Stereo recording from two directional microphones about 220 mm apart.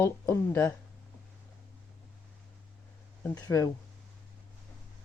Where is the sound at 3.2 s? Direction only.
15° left (ahead or behind).